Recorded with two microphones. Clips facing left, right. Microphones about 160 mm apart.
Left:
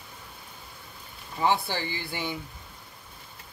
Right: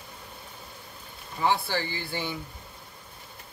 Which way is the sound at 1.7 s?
20° left (ahead or behind).